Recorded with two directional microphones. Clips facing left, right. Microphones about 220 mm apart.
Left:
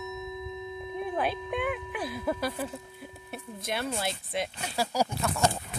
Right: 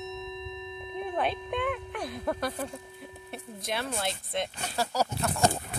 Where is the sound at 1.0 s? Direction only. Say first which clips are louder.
Even; centre (ahead or behind).